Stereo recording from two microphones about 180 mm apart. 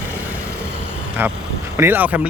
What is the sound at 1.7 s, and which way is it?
Speech, 10° right (ahead or behind).